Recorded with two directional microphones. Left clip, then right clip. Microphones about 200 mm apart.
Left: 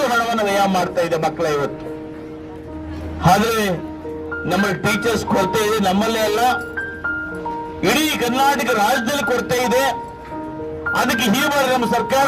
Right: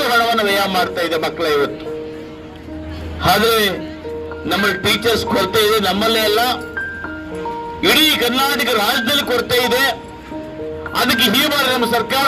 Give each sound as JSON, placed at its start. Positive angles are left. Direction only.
{"t": 0.0, "sound": "a man's voice", "side_deg": 45}
{"t": 3.2, "sound": "music", "side_deg": 45}
{"t": 7.8, "sound": "music", "side_deg": 45}
{"t": 10.9, "sound": "music", "side_deg": 45}